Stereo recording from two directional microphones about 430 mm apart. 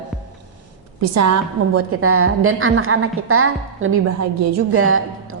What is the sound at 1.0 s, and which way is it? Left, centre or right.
A woman's voice, right.